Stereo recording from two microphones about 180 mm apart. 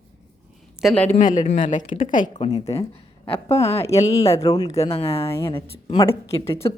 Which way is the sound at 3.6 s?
35° left (ahead or behind).